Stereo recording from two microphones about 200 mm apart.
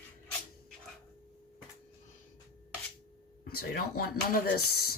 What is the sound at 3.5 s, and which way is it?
Speech, 50° left (ahead or behind).